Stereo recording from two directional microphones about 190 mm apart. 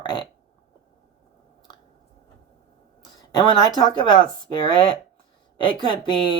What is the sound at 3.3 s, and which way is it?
Speech, 20° left (ahead or behind).